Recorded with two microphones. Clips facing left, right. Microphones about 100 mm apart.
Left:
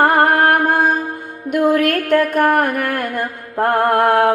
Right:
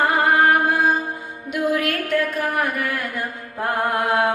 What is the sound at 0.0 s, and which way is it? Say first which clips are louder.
Music: left 4 dB; 55° left (ahead or behind).